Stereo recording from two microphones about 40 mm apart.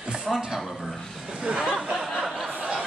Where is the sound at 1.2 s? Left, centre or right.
Centre.